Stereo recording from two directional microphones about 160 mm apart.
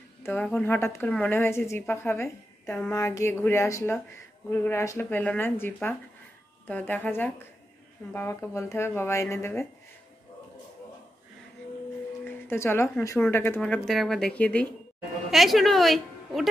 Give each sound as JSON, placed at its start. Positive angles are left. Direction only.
{"t": 0.2, "sound": "a woman's voice", "side_deg": 10}
{"t": 12.3, "sound": "a woman's voice", "side_deg": 15}